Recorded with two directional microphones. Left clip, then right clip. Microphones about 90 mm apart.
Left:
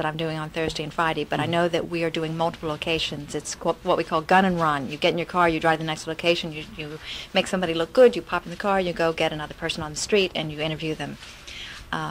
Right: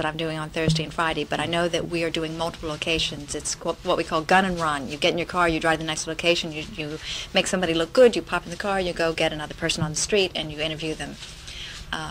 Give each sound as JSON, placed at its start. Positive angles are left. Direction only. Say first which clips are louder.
{"t": 0.0, "sound": "a woman's voice", "louder": "even", "side_deg": -45}